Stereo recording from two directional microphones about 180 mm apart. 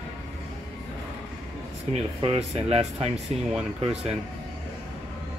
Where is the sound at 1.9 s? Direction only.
35° right (ahead or behind).